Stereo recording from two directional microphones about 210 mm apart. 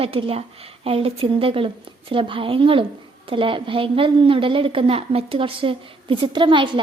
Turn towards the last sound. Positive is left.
turn(degrees=-25)  # may be behind; listen again after turning